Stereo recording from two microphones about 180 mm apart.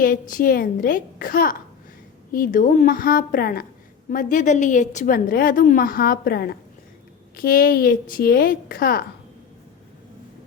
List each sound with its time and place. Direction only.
0.0 s a woman's voice: 50° left (ahead or behind)